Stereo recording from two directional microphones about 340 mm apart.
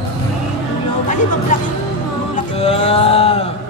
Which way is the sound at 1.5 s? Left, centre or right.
Left.